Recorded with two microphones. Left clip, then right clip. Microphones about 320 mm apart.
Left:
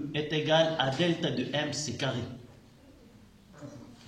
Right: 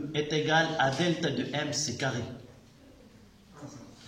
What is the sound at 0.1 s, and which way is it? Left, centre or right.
A man's voice, centre.